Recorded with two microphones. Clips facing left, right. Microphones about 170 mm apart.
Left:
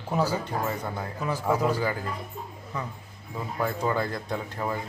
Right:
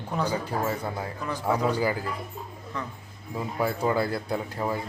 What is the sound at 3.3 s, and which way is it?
A man's voice, 10° right (ahead or behind).